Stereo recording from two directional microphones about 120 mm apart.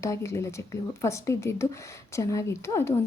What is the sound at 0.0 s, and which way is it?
Speech, 25° left (ahead or behind).